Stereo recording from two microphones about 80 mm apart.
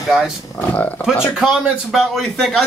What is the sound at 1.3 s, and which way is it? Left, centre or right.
A man's voice, centre.